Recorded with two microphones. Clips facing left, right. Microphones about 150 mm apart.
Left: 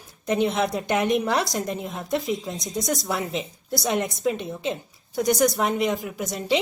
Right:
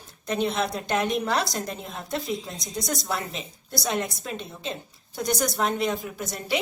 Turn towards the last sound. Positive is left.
turn(degrees=20)  # may be behind; listen again after turning